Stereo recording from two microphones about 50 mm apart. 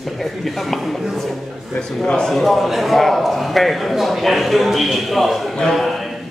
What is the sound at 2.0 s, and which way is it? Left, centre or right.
Speech, centre.